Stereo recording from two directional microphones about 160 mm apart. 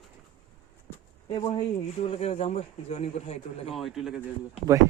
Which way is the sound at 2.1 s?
40° left (ahead or behind).